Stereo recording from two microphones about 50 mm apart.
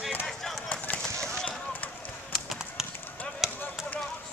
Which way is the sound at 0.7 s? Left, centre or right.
Left.